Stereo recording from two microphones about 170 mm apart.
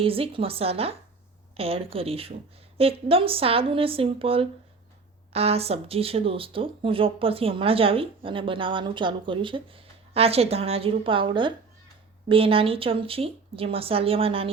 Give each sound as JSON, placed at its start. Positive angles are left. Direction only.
{"t": 0.0, "sound": "speech", "side_deg": -35}